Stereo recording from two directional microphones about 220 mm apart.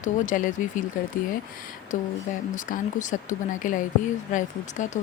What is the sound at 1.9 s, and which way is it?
Speech, 35° left (ahead or behind).